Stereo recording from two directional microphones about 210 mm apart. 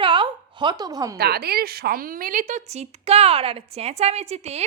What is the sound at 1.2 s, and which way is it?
A man's voice, 50° right (ahead or behind).